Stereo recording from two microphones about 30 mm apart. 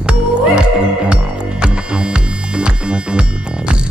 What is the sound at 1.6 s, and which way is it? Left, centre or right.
Music, right.